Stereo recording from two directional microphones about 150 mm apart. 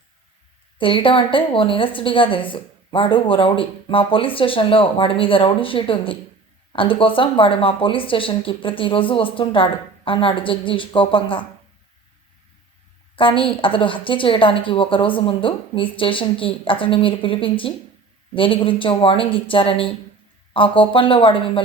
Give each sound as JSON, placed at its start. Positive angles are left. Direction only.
{"t": 0.8, "sound": "a woman's voice", "side_deg": 35}
{"t": 13.1, "sound": "a woman's voice", "side_deg": 35}